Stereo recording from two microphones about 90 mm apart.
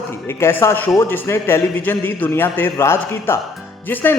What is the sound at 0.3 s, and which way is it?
A man's voice, 30° left (ahead or behind).